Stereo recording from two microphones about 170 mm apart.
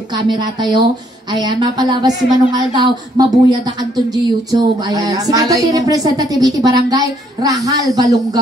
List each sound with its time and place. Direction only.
0.3 s speech: 25° right (ahead or behind)